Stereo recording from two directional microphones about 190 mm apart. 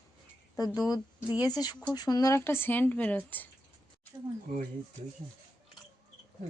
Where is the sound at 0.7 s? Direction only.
20° left (ahead or behind).